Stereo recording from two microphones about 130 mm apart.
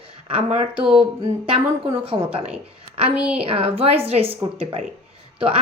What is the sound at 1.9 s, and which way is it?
Speech, 45° right (ahead or behind).